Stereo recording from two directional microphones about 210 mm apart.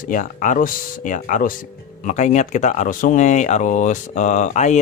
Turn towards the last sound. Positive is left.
turn(degrees=35)  # may be behind; listen again after turning